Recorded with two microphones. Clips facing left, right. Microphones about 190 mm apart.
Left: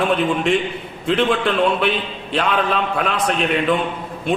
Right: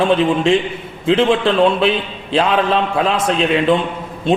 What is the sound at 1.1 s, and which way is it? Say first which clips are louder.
A man's voice: right 4 dB; 25° right (ahead or behind).